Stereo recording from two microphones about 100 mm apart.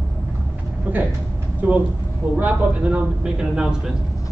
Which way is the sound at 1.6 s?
15° right (ahead or behind).